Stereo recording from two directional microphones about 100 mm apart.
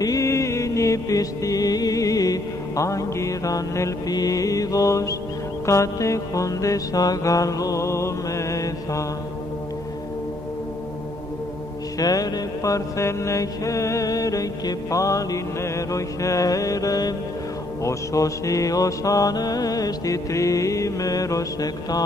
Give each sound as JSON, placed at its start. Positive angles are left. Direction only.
{"t": 0.0, "sound": "music", "side_deg": 35}
{"t": 12.0, "sound": "mantra", "side_deg": 40}